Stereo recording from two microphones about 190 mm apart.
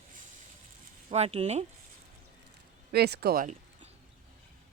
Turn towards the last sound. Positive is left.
turn(degrees=-50)  # may be behind; listen again after turning